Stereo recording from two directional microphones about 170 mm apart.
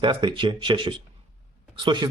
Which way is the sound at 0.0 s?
25° right (ahead or behind).